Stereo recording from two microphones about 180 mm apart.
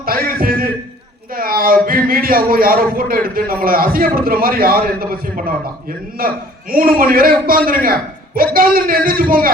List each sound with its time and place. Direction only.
0.0 s music: 55° right (ahead or behind)
1.4 s a man's voice: 55° right (ahead or behind)